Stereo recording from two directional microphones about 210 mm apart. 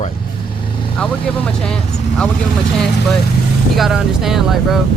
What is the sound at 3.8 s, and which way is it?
Speech, centre (ahead or behind).